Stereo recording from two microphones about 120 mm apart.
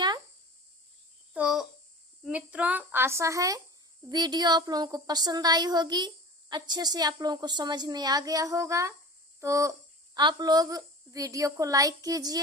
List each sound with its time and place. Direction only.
1.3 s babbling: 5° right (ahead or behind)
2.2 s speech: 10° right (ahead or behind)
10.2 s speech: 35° right (ahead or behind)